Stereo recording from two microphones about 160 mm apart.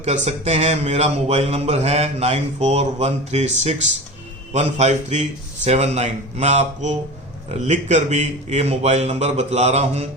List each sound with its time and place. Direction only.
0.0 s a man's voice: 40° right (ahead or behind)